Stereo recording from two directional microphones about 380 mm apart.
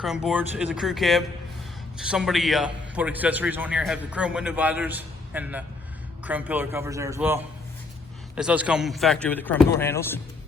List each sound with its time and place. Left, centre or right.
0.0 s a man's voice: centre